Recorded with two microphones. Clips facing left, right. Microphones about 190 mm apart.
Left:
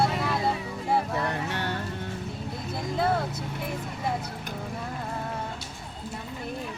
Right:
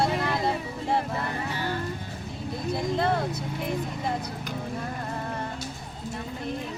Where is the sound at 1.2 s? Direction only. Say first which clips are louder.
Left 1 dB; 70° left (ahead or behind).